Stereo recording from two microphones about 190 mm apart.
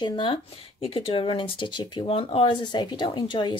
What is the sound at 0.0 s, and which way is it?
Speech, 25° left (ahead or behind).